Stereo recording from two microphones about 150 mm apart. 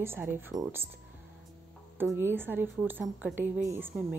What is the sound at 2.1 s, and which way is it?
A woman's voice, 15° right (ahead or behind).